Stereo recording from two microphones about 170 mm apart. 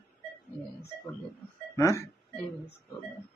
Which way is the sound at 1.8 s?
20° left (ahead or behind).